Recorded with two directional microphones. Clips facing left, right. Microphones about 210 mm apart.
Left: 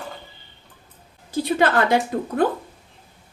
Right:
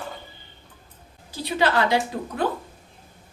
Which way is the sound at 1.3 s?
50° left (ahead or behind).